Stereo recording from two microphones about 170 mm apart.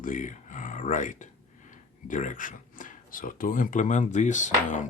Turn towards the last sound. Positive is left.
turn(degrees=45)  # may be behind; listen again after turning